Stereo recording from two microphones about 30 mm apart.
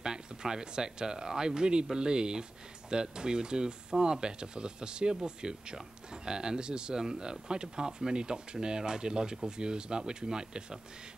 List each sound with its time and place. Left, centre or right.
0.0 s speech: right